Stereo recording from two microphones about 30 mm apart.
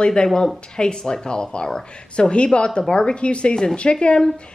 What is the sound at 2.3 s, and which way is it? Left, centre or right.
A woman's voice, left.